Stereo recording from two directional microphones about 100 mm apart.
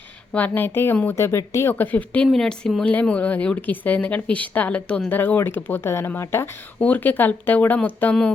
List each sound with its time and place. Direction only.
0.3 s speech: 15° left (ahead or behind)
1.8 s speech: 15° left (ahead or behind)
2.3 s speech: 5° left (ahead or behind)